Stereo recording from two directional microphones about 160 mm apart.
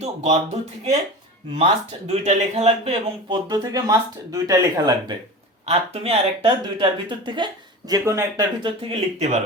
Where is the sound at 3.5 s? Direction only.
25° right (ahead or behind).